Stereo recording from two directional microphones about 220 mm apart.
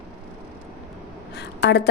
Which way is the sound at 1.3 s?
50° left (ahead or behind).